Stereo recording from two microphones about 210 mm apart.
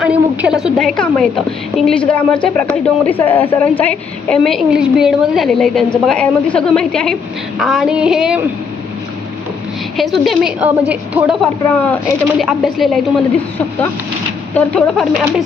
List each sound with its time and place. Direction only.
0.0 s a woman's voice: 5° right (ahead or behind)
10.0 s a woman's voice: centre (ahead or behind)
12.4 s a woman's voice: centre (ahead or behind)
14.5 s a woman's voice: 5° left (ahead or behind)